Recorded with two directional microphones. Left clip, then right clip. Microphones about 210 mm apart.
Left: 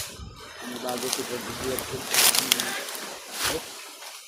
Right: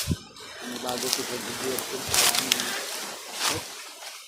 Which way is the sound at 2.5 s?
25° left (ahead or behind).